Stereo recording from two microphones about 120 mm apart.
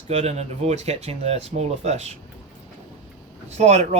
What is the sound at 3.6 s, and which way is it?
Speech, 65° right (ahead or behind).